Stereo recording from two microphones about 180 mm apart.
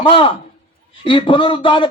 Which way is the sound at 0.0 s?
30° left (ahead or behind).